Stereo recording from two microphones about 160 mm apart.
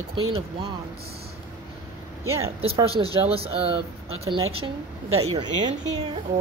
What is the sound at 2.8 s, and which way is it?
Speech, 35° right (ahead or behind).